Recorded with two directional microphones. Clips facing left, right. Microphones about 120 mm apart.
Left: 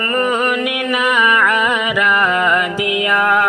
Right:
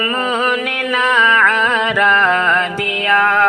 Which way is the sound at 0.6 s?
15° left (ahead or behind).